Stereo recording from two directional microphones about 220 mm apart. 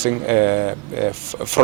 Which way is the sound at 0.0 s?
15° right (ahead or behind).